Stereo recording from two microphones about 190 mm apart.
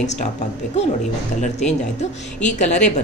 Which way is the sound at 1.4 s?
35° left (ahead or behind).